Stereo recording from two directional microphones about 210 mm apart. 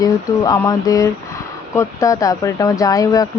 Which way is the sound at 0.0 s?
15° left (ahead or behind).